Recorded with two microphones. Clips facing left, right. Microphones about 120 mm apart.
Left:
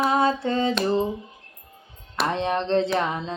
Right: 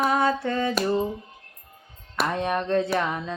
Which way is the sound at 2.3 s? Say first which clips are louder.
Left 2 dB; 25° left (ahead or behind).